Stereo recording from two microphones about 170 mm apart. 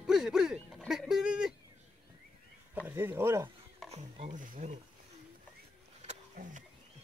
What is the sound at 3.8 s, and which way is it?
Speech, 40° right (ahead or behind).